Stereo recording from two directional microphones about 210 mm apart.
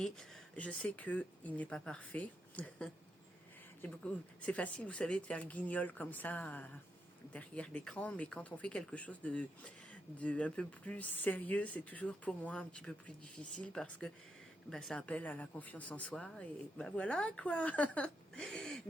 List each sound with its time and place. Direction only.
0.5 s speech: 5° left (ahead or behind)